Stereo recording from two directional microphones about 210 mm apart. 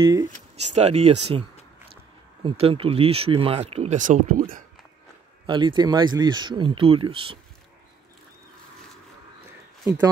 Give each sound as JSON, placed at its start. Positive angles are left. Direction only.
{"t": 0.0, "sound": "speech", "side_deg": -15}
{"t": 0.6, "sound": "speech", "side_deg": -30}
{"t": 2.4, "sound": "speech", "side_deg": -25}
{"t": 5.5, "sound": "speech", "side_deg": -20}